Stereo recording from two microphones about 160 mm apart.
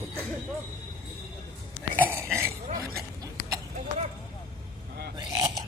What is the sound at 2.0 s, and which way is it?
Burping, 15° right (ahead or behind).